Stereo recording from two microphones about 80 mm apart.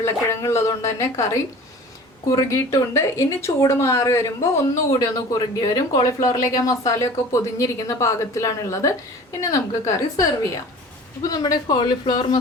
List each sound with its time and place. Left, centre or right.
0.0 s speech: left
4.9 s speech: left
11.8 s speech: left